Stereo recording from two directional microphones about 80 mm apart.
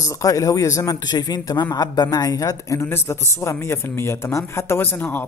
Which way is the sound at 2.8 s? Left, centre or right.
Left.